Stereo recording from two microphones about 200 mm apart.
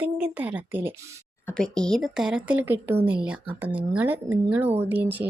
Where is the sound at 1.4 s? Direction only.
5° left (ahead or behind).